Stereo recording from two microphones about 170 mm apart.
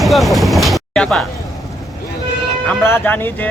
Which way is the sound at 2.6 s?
10° left (ahead or behind).